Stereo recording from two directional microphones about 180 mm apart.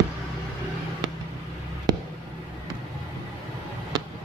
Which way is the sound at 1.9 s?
20° right (ahead or behind).